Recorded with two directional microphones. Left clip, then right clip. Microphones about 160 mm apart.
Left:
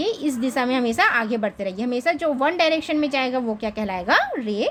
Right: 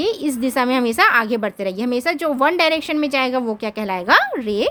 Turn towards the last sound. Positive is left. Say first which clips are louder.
# right 4 dB
turn(degrees=-35)  # may be behind; listen again after turning